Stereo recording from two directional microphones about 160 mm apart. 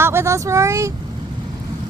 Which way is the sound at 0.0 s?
15° right (ahead or behind).